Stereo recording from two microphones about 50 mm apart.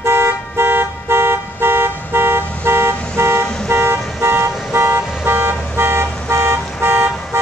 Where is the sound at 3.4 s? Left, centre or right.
Centre.